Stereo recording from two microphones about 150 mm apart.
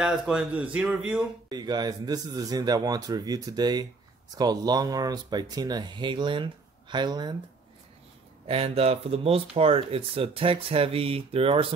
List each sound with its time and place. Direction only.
0.0 s speech: 5° right (ahead or behind)
1.5 s speech: 25° right (ahead or behind)
8.5 s speech: 40° right (ahead or behind)